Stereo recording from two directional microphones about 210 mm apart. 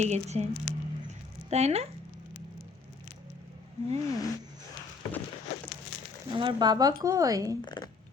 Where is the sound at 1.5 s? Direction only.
30° right (ahead or behind).